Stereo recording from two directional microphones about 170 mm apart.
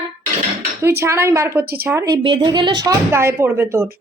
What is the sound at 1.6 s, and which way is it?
Speech, 65° right (ahead or behind).